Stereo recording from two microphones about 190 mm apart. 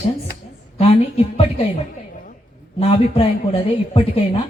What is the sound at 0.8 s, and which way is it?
Speech, 30° left (ahead or behind).